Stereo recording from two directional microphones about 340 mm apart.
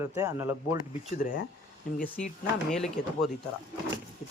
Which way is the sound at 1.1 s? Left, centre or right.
Left.